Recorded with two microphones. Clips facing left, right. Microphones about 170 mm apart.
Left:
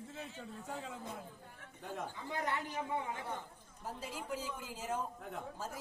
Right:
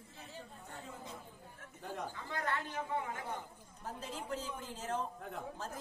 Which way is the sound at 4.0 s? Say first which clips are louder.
Even; 10° left (ahead or behind).